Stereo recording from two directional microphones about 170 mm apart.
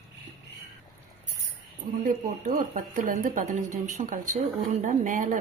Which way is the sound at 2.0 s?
50° right (ahead or behind).